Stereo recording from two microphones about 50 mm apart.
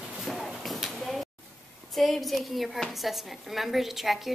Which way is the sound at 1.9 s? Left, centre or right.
Centre.